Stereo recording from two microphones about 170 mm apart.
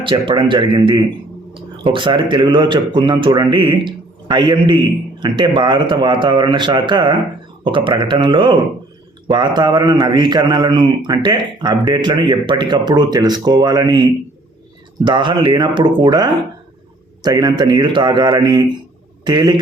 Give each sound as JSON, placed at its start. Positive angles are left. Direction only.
{"t": 0.0, "sound": "a man's voice", "side_deg": -30}